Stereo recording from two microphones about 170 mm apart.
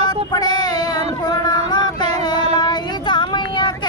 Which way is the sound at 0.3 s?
25° left (ahead or behind).